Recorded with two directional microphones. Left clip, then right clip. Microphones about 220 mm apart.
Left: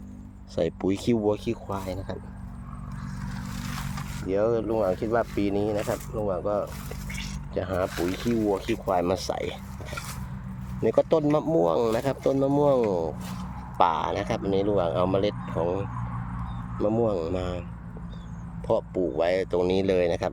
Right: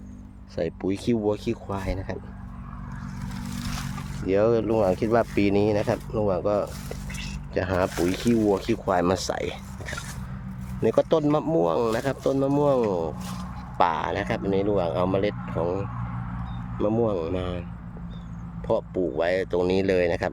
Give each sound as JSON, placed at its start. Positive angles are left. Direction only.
{"t": 0.5, "sound": "speech", "side_deg": 5}
{"t": 4.3, "sound": "speech", "side_deg": -20}
{"t": 7.9, "sound": "speech", "side_deg": -5}
{"t": 8.4, "sound": "speech", "side_deg": -20}
{"t": 10.8, "sound": "speech", "side_deg": -10}
{"t": 16.8, "sound": "speech", "side_deg": -5}
{"t": 18.7, "sound": "speech", "side_deg": -5}